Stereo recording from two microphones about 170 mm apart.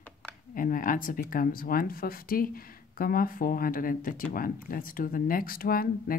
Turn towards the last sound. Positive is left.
turn(degrees=60)  # may be behind; listen again after turning